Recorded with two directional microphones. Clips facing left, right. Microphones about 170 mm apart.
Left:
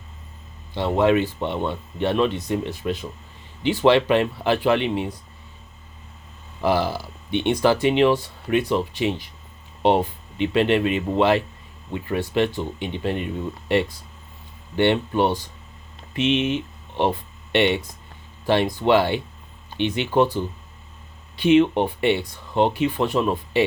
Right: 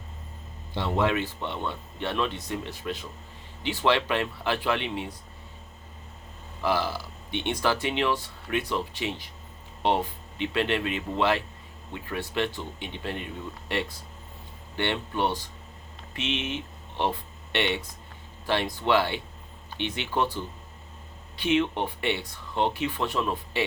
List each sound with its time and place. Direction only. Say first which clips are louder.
1.0 s speech: left 8 dB; 20° left (ahead or behind)
6.6 s speech: left 6 dB; 15° left (ahead or behind)
21.4 s speech: left 9 dB; 15° left (ahead or behind)